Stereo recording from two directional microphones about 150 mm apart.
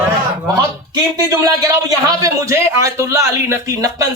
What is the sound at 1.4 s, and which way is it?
Speech, 25° right (ahead or behind).